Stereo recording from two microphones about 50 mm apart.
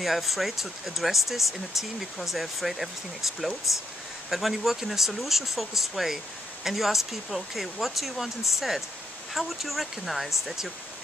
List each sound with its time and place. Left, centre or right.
0.0 s speech: centre